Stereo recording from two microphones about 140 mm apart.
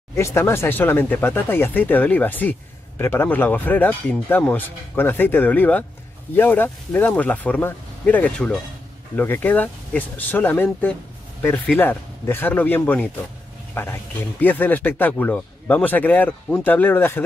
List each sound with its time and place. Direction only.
0.1 s speech: 20° left (ahead or behind)